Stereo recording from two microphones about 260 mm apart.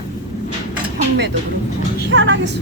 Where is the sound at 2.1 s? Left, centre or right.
Right.